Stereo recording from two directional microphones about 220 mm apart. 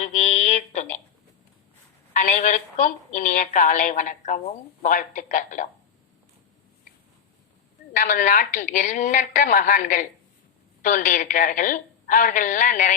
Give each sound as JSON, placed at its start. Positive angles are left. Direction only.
{"t": 0.0, "sound": "a sound", "side_deg": 30}
{"t": 2.1, "sound": "a woman's voice", "side_deg": 35}
{"t": 7.9, "sound": "a woman's voice", "side_deg": 35}